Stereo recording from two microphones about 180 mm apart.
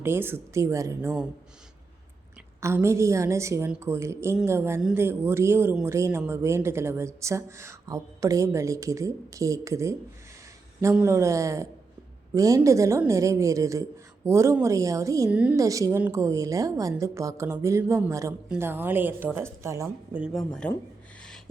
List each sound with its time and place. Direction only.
0.0 s speech: 10° right (ahead or behind)
2.6 s speech: 15° right (ahead or behind)
15.3 s speech: 5° right (ahead or behind)
15.5 s speech: 20° right (ahead or behind)
20.5 s speech: 5° left (ahead or behind)